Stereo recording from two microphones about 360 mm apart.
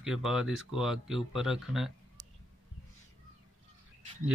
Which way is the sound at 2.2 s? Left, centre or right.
Right.